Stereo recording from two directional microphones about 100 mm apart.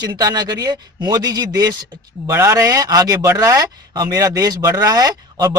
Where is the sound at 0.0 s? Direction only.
40° right (ahead or behind).